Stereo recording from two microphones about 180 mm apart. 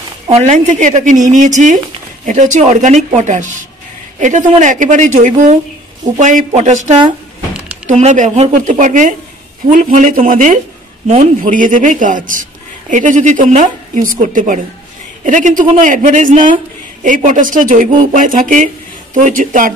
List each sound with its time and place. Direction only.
0.3 s speech: 40° right (ahead or behind)